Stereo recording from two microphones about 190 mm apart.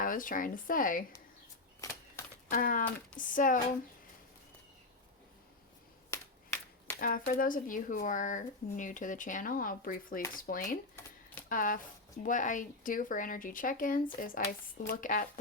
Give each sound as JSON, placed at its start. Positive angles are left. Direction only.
{"t": 0.0, "sound": "speech", "side_deg": 45}
{"t": 1.8, "sound": "a sound", "side_deg": 15}
{"t": 2.5, "sound": "speech", "side_deg": 45}
{"t": 6.1, "sound": "finger snapping", "side_deg": 15}
{"t": 7.0, "sound": "speech", "side_deg": 45}
{"t": 11.0, "sound": "shuffling cards", "side_deg": 10}
{"t": 11.4, "sound": "speech", "side_deg": 45}